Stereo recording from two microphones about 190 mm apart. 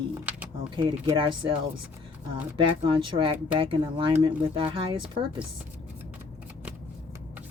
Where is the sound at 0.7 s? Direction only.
25° right (ahead or behind).